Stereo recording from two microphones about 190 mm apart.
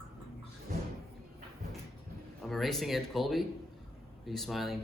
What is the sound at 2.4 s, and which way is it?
Speech, centre (ahead or behind).